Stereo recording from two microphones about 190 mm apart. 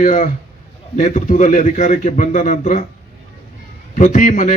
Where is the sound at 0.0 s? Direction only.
40° left (ahead or behind).